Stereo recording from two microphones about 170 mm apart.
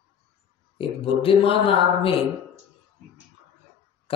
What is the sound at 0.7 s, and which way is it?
Speech, 30° left (ahead or behind).